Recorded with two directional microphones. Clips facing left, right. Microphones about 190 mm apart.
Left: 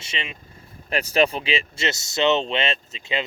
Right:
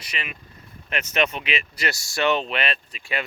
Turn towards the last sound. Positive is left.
turn(degrees=25)  # may be behind; listen again after turning